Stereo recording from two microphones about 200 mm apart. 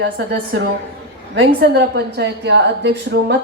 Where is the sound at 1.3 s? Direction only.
55° right (ahead or behind).